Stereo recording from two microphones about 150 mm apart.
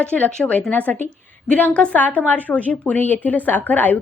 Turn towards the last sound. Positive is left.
turn(degrees=10)  # may be behind; listen again after turning